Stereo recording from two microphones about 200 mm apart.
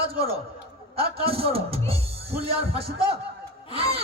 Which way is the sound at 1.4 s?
30° right (ahead or behind).